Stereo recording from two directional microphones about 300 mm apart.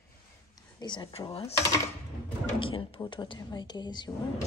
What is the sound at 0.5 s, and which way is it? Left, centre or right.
Speech, centre.